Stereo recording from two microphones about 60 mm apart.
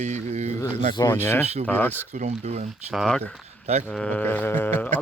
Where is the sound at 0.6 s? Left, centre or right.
Left.